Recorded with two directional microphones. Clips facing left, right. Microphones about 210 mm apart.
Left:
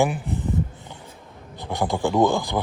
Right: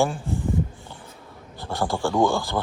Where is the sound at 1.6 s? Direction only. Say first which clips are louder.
Left 2 dB; 20° left (ahead or behind).